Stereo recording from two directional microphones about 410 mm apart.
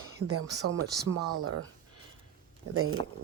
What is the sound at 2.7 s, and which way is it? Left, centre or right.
Speech, right.